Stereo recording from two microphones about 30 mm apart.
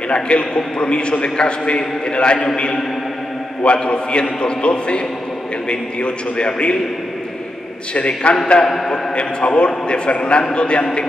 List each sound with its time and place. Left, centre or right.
0.1 s a man's voice: left
8.3 s a man's voice: left
8.6 s a man's voice: centre
8.9 s a man's voice: left